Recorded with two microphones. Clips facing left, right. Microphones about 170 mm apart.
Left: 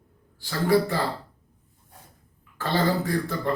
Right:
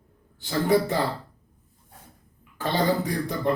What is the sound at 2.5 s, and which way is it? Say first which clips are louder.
Speech: even; 15° right (ahead or behind).